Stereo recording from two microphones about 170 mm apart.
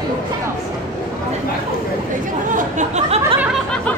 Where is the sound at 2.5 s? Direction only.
45° right (ahead or behind).